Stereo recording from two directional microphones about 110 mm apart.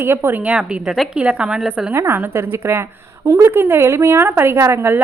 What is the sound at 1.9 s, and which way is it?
A woman's voice, 25° right (ahead or behind).